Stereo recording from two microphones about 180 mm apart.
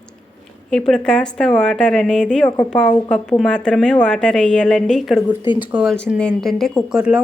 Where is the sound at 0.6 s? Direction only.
5° left (ahead or behind).